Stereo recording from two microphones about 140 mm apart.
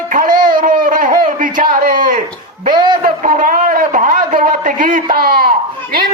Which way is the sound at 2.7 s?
30° right (ahead or behind).